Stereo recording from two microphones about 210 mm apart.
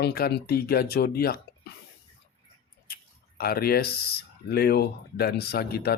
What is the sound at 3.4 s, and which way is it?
A man's voice, 45° left (ahead or behind).